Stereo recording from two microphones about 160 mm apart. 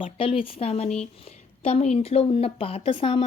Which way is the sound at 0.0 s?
35° left (ahead or behind).